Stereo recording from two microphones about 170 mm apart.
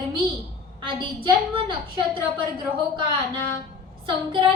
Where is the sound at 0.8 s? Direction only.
30° right (ahead or behind).